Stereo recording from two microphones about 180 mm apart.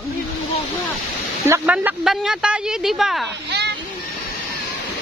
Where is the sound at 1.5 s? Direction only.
10° right (ahead or behind).